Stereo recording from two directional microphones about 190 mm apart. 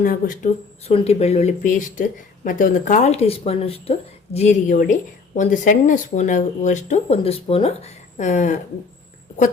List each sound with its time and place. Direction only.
0.0 s speech: 45° left (ahead or behind)